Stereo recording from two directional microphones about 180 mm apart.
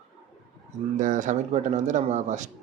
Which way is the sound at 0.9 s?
45° right (ahead or behind).